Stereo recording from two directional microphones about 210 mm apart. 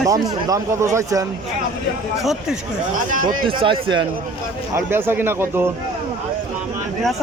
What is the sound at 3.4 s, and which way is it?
Speech, 25° right (ahead or behind).